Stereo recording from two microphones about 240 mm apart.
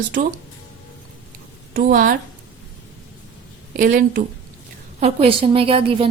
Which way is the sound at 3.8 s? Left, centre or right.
Right.